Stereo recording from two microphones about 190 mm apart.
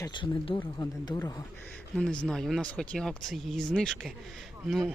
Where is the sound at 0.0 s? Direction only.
25° left (ahead or behind).